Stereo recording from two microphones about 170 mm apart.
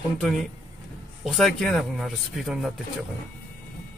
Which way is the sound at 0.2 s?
Centre (ahead or behind).